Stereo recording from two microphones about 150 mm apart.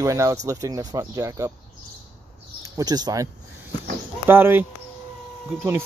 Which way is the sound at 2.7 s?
25° right (ahead or behind).